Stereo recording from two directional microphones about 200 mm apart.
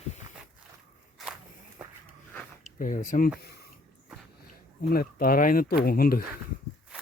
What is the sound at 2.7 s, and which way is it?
Speech, 40° left (ahead or behind).